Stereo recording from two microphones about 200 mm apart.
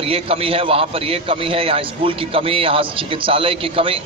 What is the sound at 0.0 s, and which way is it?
A man's voice, 30° right (ahead or behind).